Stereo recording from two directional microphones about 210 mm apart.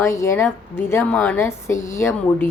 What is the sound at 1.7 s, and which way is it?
Speech, 35° left (ahead or behind).